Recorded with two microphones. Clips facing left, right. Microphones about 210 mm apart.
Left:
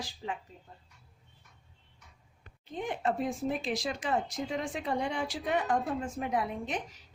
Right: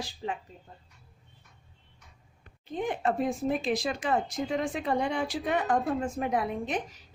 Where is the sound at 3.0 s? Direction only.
55° right (ahead or behind).